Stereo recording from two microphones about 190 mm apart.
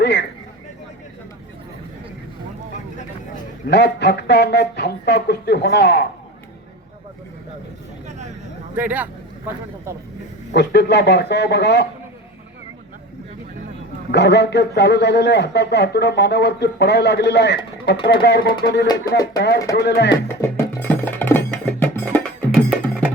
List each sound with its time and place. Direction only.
0.0 s a sound: 65° left (ahead or behind)
3.7 s a man's voice: 60° left (ahead or behind)
8.7 s speech: 10° right (ahead or behind)
10.5 s a man's voice: 65° left (ahead or behind)
14.1 s a man's voice: 65° left (ahead or behind)
20.2 s music: 10° left (ahead or behind)